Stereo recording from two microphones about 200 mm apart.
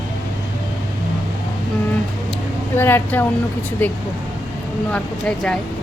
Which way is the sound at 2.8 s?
10° left (ahead or behind).